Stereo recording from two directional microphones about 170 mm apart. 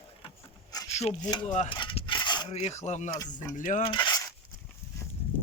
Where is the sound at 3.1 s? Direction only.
20° left (ahead or behind).